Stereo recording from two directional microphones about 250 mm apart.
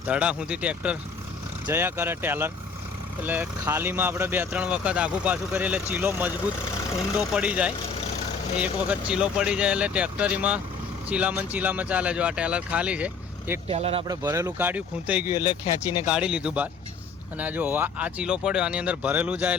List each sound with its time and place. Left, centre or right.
0.0 s speech: centre
13.7 s speech: right
14.2 s speech: centre